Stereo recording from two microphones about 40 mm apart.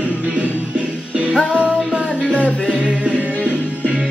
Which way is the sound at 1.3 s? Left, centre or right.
Right.